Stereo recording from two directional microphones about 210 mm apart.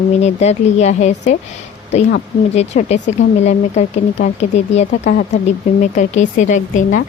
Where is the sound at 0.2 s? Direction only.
30° left (ahead or behind).